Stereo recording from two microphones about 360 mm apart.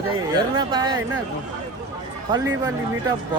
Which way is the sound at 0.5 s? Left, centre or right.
Centre.